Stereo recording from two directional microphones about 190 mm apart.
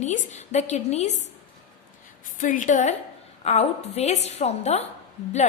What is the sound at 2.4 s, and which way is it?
A woman's voice, 40° left (ahead or behind).